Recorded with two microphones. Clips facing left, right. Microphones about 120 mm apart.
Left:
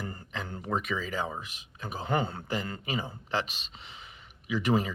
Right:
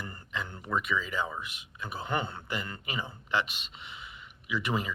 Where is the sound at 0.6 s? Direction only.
40° left (ahead or behind).